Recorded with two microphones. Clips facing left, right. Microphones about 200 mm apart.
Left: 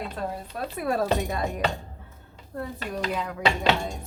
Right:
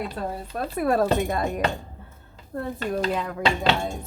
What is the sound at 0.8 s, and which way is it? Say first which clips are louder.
Speech: right 4 dB; 50° right (ahead or behind).